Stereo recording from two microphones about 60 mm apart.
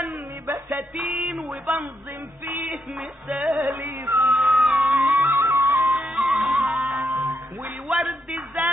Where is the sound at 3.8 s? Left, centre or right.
Right.